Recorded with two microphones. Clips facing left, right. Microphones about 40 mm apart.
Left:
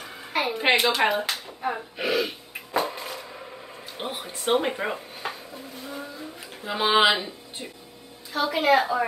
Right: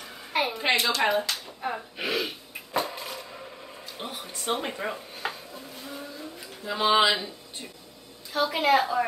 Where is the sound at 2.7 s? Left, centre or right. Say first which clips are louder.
Left 3 dB; centre.